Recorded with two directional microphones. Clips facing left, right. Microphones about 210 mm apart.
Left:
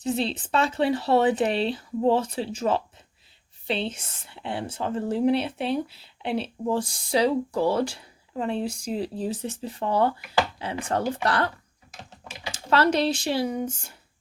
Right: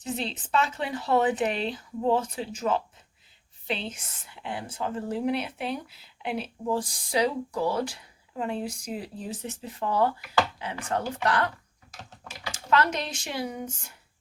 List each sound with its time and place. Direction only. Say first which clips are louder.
0.0 s speech: left 6 dB; 30° left (ahead or behind)